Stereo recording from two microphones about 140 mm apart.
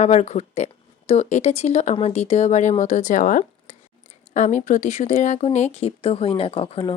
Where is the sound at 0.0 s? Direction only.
55° left (ahead or behind).